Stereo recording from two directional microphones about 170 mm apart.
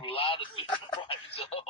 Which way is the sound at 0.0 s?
30° left (ahead or behind).